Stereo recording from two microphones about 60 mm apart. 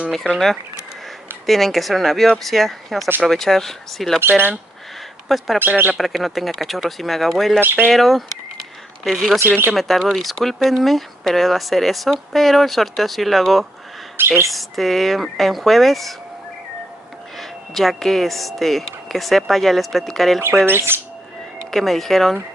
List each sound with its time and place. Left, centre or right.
0.3 s speech: centre
4.2 s speech: right
5.6 s speech: right
5.9 s speech: centre
7.6 s speech: right
7.9 s speech: centre
14.2 s speech: right
14.5 s speech: centre
17.4 s speech: centre
20.5 s speech: right
21.6 s speech: centre